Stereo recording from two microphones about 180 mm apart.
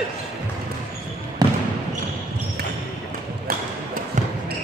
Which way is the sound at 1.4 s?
20° right (ahead or behind).